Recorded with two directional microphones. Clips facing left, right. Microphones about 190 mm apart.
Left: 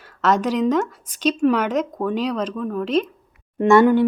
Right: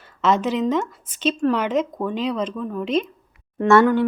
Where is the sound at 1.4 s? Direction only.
5° left (ahead or behind).